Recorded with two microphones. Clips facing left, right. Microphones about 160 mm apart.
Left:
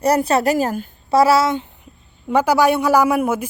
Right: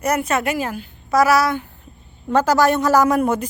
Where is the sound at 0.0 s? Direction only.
35° left (ahead or behind).